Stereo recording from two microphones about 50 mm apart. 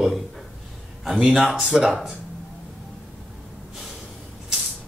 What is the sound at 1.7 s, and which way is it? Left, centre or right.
Speech, centre.